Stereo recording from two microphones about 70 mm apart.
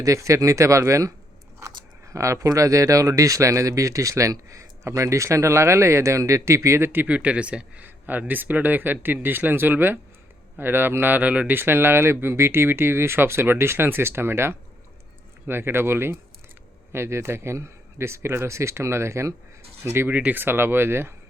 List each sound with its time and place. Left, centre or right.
0.0 s speech: right
2.1 s speech: right
7.1 s speech: centre
11.5 s speech: right
20.1 s speech: right